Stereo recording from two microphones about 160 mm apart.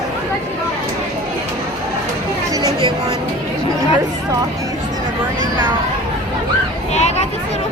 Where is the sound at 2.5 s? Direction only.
25° right (ahead or behind).